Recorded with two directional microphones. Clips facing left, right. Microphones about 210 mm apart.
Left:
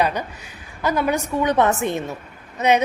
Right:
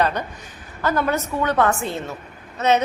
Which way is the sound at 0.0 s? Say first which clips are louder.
Even; 10° left (ahead or behind).